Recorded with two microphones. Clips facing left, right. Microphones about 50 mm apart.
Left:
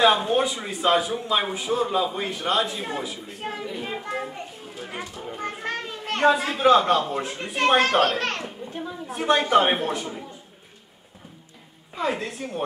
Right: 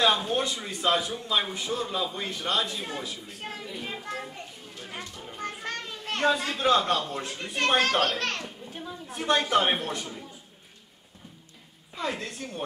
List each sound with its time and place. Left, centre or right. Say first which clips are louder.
0.0 s a man's voice: left 5 dB; centre
8.5 s children playing: left 6 dB; centre
9.0 s a man's voice: left 4 dB; centre
11.9 s a man's voice: left 6 dB; centre